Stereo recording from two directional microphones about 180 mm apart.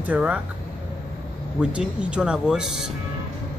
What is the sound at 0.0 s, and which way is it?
Speech, 10° right (ahead or behind).